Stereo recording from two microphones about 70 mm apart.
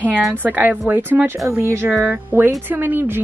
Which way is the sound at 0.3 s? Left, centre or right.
Right.